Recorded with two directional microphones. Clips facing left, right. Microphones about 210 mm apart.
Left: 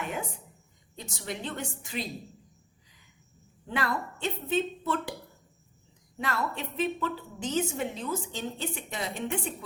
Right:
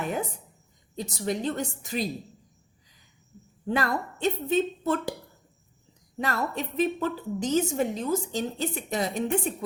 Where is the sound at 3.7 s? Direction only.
40° right (ahead or behind).